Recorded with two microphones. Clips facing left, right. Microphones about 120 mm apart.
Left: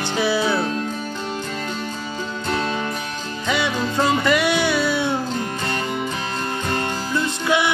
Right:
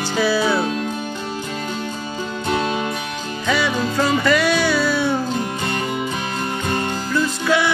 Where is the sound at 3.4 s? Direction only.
20° left (ahead or behind).